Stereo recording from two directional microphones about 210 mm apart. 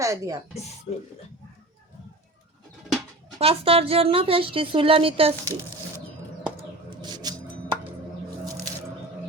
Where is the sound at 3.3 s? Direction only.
25° right (ahead or behind).